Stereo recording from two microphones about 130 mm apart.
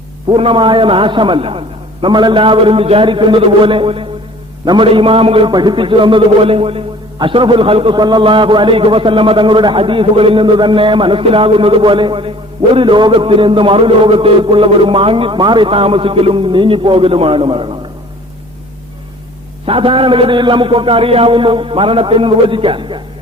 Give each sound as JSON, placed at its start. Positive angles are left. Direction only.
{"t": 0.3, "sound": "a man's voice", "side_deg": -40}
{"t": 19.6, "sound": "a man's voice", "side_deg": -45}